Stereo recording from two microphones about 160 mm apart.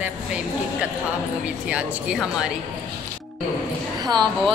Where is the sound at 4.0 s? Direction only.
25° right (ahead or behind).